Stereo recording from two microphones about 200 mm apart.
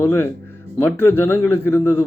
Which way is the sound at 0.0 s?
15° left (ahead or behind).